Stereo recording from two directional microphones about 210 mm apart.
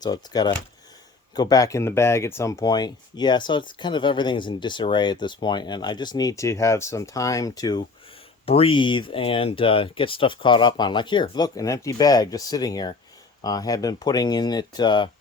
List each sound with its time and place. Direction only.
0.0 s speech: 20° left (ahead or behind)